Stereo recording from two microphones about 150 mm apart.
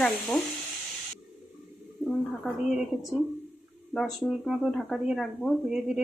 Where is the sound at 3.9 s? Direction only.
Centre (ahead or behind).